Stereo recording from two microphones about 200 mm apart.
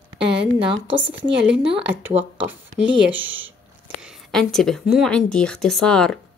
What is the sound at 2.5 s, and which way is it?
Speech, 5° right (ahead or behind).